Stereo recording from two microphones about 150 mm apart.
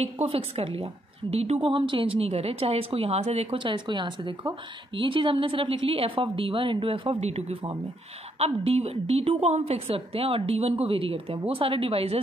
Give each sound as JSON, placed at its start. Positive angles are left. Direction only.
{"t": 0.0, "sound": "a woman's voice", "side_deg": -40}